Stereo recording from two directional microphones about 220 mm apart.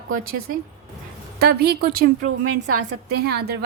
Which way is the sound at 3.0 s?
45° right (ahead or behind).